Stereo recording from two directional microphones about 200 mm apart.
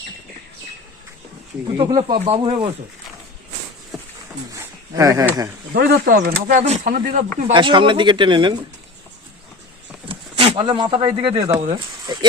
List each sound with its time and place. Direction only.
1.8 s speech: 25° right (ahead or behind)
4.5 s a sound: 15° right (ahead or behind)
5.7 s speech: 50° right (ahead or behind)
7.5 s speech: 25° right (ahead or behind)
10.1 s speech: 25° right (ahead or behind)